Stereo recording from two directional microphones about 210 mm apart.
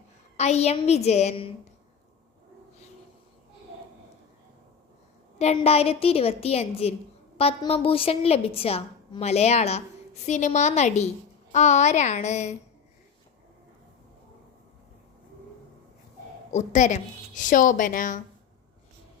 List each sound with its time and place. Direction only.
0.3 s a woman's voice: 30° left (ahead or behind)
5.4 s a woman's voice: 30° left (ahead or behind)
16.5 s a woman's voice: 35° left (ahead or behind)